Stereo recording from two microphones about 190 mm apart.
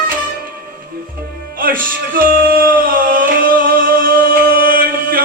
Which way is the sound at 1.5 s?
45° right (ahead or behind).